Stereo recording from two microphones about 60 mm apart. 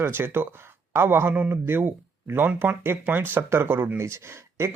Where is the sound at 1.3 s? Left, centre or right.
Right.